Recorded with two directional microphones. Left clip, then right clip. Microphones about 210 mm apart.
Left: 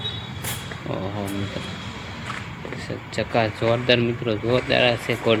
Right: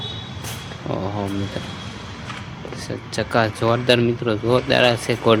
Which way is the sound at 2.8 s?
20° right (ahead or behind).